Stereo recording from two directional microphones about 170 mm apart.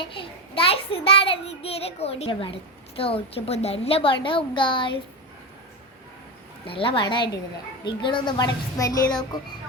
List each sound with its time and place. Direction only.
0.0 s a child's voice: 30° left (ahead or behind)
6.7 s a child's voice: 30° left (ahead or behind)